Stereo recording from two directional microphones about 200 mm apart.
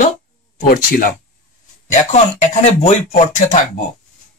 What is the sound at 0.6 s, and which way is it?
Speech, 45° left (ahead or behind).